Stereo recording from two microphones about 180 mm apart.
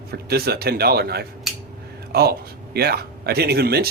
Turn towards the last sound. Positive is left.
turn(degrees=-60)  # may be behind; listen again after turning